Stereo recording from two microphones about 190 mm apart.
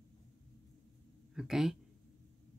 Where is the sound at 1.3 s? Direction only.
Centre (ahead or behind).